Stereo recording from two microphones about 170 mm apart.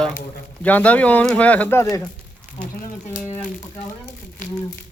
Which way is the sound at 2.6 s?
50° left (ahead or behind).